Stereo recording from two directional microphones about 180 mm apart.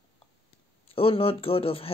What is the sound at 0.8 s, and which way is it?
Speech, 30° left (ahead or behind).